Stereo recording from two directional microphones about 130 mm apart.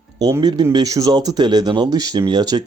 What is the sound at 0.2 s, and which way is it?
Speech, 30° right (ahead or behind).